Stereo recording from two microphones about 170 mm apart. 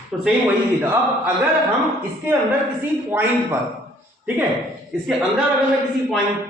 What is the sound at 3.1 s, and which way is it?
Speech, 10° right (ahead or behind).